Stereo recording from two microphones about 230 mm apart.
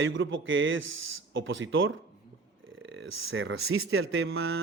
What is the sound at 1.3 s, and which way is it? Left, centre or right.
Speech, right.